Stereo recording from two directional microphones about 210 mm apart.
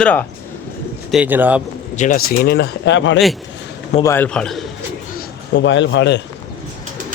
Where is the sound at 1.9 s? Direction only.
40° left (ahead or behind); by 3.2 s 60° left (ahead or behind).